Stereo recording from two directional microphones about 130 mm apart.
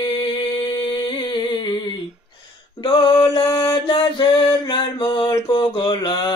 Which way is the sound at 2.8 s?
40° left (ahead or behind).